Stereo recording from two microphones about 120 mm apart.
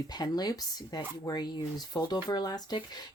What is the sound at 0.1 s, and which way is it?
Speech, 35° left (ahead or behind).